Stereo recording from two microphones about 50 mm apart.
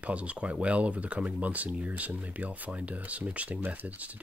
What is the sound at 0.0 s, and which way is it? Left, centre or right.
Speech, right.